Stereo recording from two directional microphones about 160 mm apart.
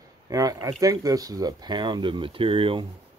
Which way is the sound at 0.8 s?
20° right (ahead or behind).